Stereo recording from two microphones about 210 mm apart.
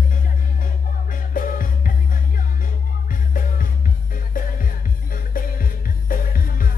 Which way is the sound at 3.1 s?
40° left (ahead or behind).